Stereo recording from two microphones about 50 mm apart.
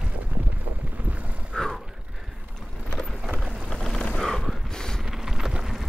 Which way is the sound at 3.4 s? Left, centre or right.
Centre.